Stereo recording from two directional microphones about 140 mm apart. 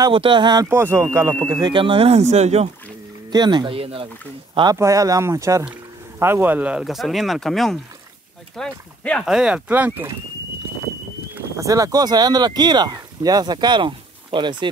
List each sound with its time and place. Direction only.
0.0 s speech: 35° right (ahead or behind)
0.7 s speech: 20° right (ahead or behind)
1.5 s speech: 35° right (ahead or behind); by 2.7 s 50° right (ahead or behind)
3.3 s speech: 30° right (ahead or behind)
4.7 s speech: 25° right (ahead or behind); by 9.2 s 10° left (ahead or behind)
9.2 s speech: 5° right (ahead or behind)
11.3 s speech: 20° right (ahead or behind)